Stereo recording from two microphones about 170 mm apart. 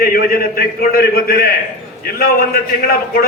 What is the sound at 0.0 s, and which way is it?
A man's voice, 60° left (ahead or behind).